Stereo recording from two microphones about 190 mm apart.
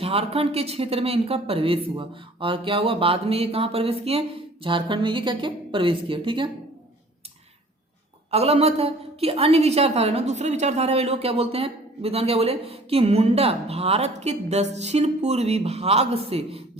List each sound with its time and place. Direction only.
0.0 s a woman's voice: 30° right (ahead or behind)
8.3 s a woman's voice: 30° right (ahead or behind)